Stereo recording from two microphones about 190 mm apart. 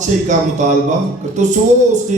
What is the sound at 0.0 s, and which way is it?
A man's voice, 40° right (ahead or behind).